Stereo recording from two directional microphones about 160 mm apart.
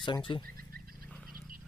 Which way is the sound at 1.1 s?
Centre (ahead or behind).